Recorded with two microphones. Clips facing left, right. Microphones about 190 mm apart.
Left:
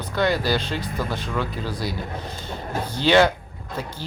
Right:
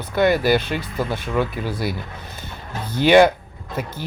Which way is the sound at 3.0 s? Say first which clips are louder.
Right 4 dB; 15° right (ahead or behind).